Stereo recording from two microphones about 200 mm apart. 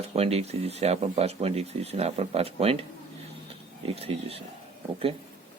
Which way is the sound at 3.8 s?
30° right (ahead or behind).